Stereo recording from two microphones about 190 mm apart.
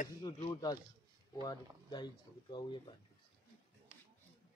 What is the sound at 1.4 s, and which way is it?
Speech, 20° left (ahead or behind).